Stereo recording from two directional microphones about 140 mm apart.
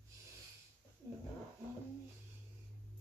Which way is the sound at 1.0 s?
20° right (ahead or behind).